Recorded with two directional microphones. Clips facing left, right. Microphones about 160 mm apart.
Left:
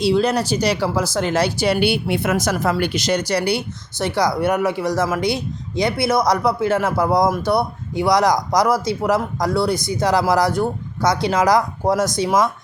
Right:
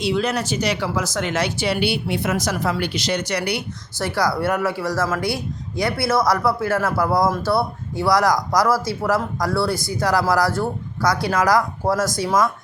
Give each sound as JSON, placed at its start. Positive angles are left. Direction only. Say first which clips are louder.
{"t": 0.0, "sound": "speech", "louder": "left 4 dB", "side_deg": 35}